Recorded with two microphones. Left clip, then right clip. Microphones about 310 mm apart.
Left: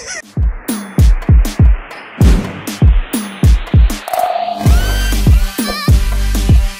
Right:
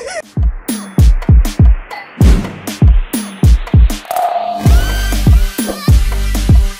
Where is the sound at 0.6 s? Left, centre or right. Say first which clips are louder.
Even; centre.